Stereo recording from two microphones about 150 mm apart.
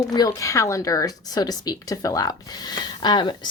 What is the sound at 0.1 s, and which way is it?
A woman's voice, 25° left (ahead or behind).